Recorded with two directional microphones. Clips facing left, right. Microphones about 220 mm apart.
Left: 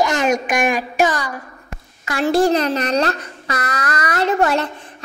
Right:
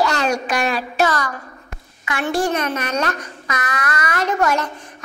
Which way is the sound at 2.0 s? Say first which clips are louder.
Left 5 dB; 30° left (ahead or behind).